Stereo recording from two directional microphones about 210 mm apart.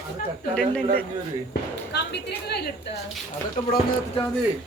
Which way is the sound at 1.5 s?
55° left (ahead or behind).